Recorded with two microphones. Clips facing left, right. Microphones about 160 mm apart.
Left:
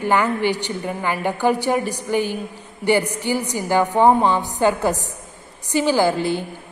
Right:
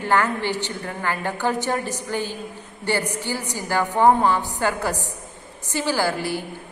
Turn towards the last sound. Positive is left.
turn(degrees=20)  # may be behind; listen again after turning